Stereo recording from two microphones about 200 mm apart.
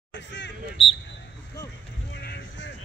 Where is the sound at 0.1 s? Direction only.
65° left (ahead or behind).